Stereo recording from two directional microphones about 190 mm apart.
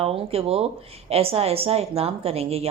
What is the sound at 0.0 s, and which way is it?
A woman's voice, 30° right (ahead or behind).